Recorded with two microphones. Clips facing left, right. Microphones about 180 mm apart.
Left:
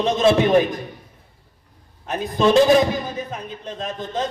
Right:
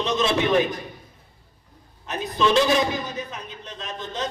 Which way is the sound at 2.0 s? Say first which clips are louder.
Left 4 dB; 50° left (ahead or behind).